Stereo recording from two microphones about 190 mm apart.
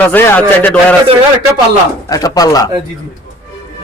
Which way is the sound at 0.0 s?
10° left (ahead or behind).